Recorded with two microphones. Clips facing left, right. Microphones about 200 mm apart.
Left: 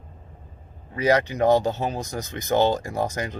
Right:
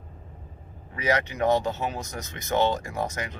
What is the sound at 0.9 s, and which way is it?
Speech, 35° left (ahead or behind).